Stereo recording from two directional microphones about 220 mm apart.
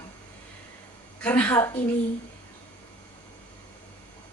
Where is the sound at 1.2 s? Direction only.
5° left (ahead or behind).